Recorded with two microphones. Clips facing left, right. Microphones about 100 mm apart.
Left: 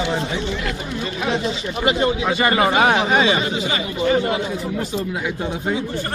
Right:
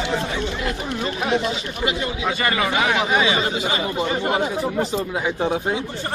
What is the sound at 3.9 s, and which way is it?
Speech, 45° right (ahead or behind).